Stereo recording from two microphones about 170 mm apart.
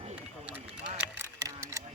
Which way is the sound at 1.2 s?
20° right (ahead or behind).